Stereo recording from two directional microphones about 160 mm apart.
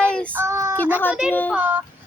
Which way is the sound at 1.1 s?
5° right (ahead or behind).